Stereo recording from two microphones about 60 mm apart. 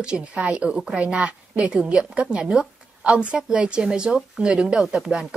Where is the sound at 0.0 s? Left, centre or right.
Centre.